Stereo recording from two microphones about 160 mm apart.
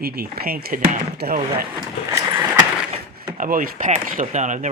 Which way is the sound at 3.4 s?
60° right (ahead or behind).